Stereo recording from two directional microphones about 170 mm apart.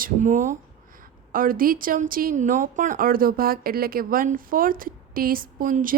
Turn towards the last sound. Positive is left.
turn(degrees=-55)  # may be behind; listen again after turning